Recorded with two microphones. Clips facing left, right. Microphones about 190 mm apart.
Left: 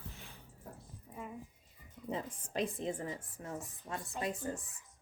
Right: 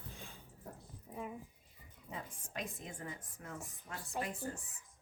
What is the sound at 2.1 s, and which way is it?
A woman's voice, 30° left (ahead or behind).